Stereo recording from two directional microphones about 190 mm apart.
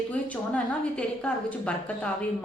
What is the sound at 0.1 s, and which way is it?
A woman's voice, 5° left (ahead or behind).